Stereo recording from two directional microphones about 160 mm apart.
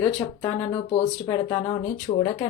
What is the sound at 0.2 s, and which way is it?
Speech, 20° left (ahead or behind).